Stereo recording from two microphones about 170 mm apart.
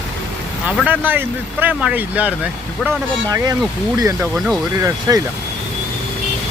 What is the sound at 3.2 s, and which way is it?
Speech, 20° right (ahead or behind).